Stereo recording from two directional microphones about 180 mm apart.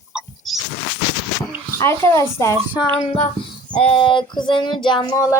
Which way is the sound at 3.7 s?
30° left (ahead or behind).